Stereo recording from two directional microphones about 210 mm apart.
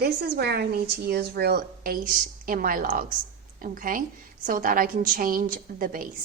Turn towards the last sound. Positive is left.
turn(degrees=-40)  # may be behind; listen again after turning